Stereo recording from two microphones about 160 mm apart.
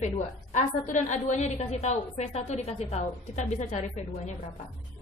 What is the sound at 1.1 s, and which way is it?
A woman's voice, 45° left (ahead or behind).